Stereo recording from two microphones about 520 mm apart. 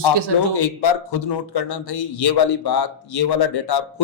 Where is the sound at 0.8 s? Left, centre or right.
Left.